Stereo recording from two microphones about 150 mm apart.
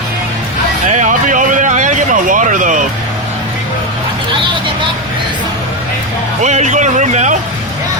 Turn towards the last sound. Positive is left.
turn(degrees=-55)  # may be behind; listen again after turning